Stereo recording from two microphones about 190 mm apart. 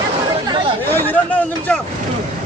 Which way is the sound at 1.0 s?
10° left (ahead or behind).